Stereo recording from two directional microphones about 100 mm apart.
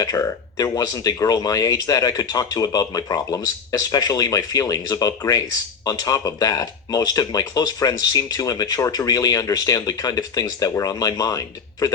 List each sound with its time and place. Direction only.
0.0 s speech: 35° left (ahead or behind)